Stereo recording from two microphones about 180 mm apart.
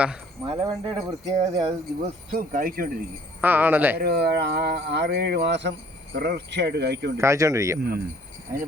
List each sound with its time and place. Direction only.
0.4 s speech: 25° right (ahead or behind)
2.3 s speech: 50° right (ahead or behind)
3.4 s speech: 10° right (ahead or behind)
3.9 s speech: 60° right (ahead or behind)
7.2 s speech: 15° right (ahead or behind)
7.8 s speech: 60° right (ahead or behind)